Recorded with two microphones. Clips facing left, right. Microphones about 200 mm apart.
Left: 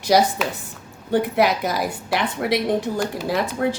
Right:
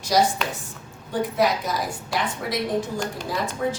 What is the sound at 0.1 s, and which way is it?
A woman's voice, 65° left (ahead or behind).